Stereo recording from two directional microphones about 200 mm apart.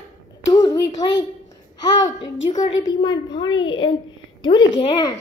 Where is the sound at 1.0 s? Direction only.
25° left (ahead or behind).